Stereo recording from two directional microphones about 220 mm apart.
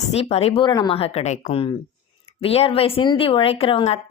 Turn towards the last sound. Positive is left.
turn(degrees=25)  # may be behind; listen again after turning